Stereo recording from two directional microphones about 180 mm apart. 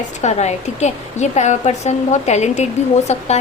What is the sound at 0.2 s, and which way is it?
A woman's voice, 40° left (ahead or behind).